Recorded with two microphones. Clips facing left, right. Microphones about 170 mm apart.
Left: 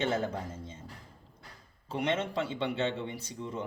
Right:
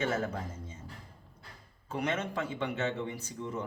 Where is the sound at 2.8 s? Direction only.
25° left (ahead or behind).